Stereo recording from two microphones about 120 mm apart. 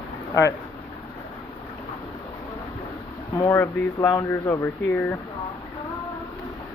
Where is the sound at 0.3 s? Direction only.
25° left (ahead or behind).